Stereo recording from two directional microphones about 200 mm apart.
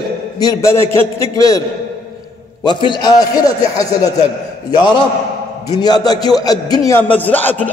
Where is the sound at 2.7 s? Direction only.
20° left (ahead or behind).